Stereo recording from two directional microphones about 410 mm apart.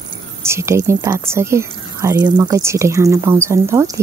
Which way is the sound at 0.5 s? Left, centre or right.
Centre.